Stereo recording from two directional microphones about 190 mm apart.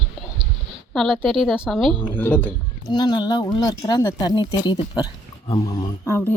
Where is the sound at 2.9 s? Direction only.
25° left (ahead or behind).